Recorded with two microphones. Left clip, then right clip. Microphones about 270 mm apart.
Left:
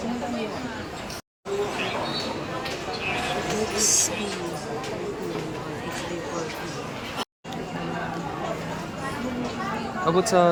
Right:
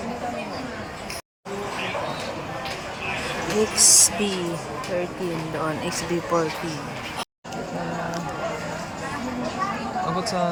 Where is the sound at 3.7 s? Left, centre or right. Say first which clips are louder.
Right 6 dB; centre.